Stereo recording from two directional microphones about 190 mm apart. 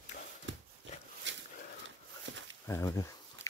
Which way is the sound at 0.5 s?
75° right (ahead or behind).